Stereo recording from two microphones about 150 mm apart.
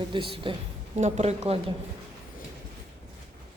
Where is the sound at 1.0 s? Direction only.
50° right (ahead or behind).